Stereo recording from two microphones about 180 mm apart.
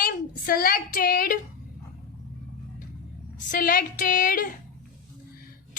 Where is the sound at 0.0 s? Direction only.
55° left (ahead or behind).